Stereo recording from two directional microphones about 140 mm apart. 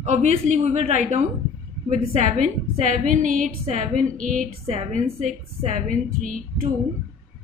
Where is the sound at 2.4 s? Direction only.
60° right (ahead or behind).